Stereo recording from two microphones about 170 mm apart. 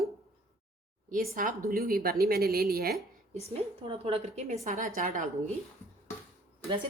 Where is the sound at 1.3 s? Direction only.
55° right (ahead or behind).